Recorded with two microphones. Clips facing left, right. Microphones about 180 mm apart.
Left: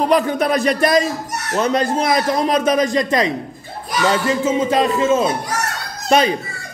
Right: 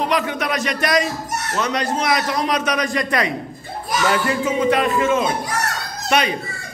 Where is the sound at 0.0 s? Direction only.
35° left (ahead or behind).